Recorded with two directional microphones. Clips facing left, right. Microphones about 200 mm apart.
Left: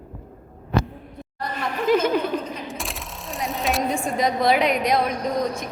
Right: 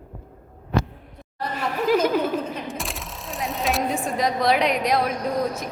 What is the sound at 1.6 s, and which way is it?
A woman's voice, 5° right (ahead or behind).